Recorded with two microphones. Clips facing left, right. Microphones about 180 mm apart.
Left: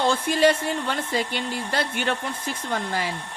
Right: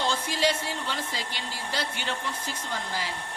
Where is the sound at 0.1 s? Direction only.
55° left (ahead or behind).